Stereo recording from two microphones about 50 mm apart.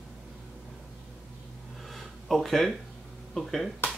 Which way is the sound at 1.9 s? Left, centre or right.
Centre.